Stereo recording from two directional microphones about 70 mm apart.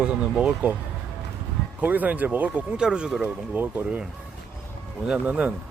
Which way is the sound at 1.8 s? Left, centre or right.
Right.